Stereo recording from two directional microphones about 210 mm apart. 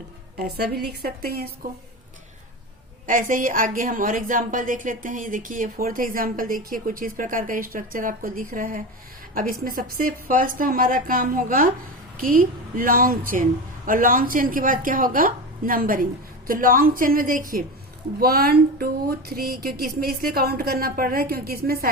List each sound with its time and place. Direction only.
0.3 s speech: 50° right (ahead or behind)
3.1 s a woman's voice: 40° right (ahead or behind)